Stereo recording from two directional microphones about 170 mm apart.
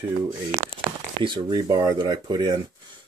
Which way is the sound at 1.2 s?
25° right (ahead or behind).